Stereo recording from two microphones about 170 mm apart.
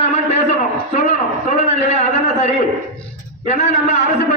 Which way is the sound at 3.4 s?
45° left (ahead or behind).